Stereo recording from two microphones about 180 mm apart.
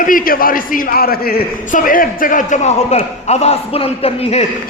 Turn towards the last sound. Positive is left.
turn(degrees=35)  # may be behind; listen again after turning